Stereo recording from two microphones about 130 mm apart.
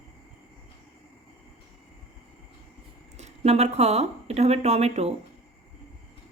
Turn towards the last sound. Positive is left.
turn(degrees=-55)  # may be behind; listen again after turning